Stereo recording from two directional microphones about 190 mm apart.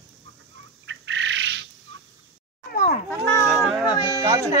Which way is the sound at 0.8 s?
75° right (ahead or behind).